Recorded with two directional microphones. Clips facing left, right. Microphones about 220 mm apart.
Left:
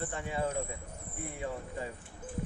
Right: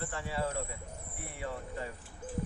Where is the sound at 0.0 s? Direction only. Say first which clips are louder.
Left 1 dB; 20° left (ahead or behind).